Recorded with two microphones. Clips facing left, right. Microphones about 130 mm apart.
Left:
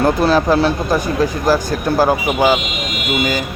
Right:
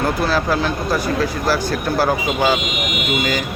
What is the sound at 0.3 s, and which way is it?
Speech, 20° left (ahead or behind).